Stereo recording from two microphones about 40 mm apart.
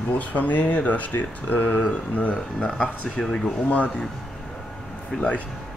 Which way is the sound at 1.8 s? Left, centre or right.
Left.